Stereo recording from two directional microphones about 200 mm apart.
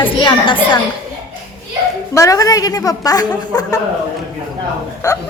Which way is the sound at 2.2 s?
15° left (ahead or behind).